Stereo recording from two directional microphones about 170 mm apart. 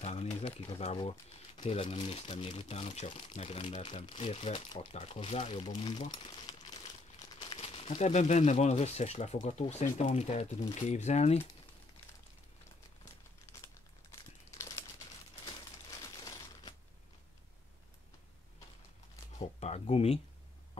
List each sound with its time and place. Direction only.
0.0 s crumpling: 40° left (ahead or behind)
0.6 s speech: 35° left (ahead or behind)
19.3 s a sound: 40° left (ahead or behind)